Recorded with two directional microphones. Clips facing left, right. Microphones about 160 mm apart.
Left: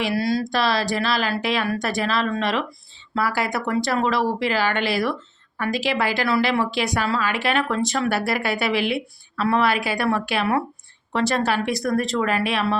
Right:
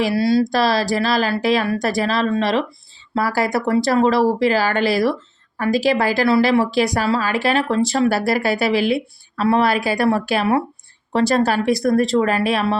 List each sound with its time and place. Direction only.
0.0 s a woman's voice: 30° right (ahead or behind)